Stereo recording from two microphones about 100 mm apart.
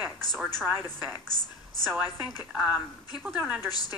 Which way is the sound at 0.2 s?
5° left (ahead or behind).